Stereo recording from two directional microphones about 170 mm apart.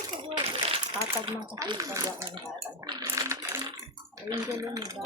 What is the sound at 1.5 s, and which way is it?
Speech, 20° right (ahead or behind).